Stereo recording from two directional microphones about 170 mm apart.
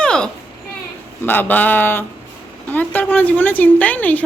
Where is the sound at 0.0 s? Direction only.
5° left (ahead or behind).